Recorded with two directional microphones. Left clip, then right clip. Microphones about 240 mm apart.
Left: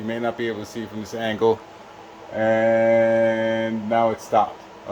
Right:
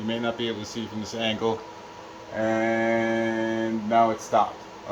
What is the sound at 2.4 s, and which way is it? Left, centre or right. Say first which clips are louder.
Speech: left 6 dB; left.